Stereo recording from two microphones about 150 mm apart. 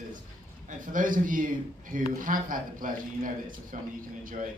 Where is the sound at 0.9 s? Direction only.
65° right (ahead or behind).